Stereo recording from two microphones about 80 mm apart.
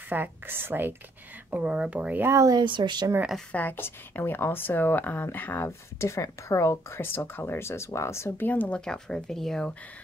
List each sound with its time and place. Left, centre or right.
0.1 s a woman's voice: right
1.5 s speech: centre
2.2 s speech: right
2.5 s speech: right
3.5 s speech: left
8.5 s speech: centre